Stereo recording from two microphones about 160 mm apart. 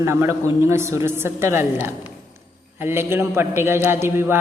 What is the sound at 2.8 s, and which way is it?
A man's voice, 15° right (ahead or behind).